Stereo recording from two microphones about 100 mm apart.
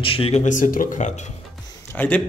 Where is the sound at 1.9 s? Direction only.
15° left (ahead or behind).